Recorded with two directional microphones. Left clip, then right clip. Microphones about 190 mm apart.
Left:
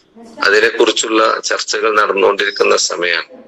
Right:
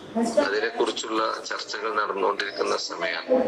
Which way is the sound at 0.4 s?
65° left (ahead or behind).